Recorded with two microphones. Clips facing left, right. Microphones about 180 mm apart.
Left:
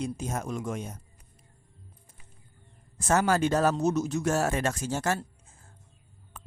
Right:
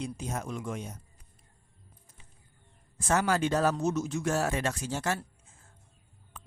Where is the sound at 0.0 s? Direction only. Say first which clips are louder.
Left 3 dB; 45° left (ahead or behind).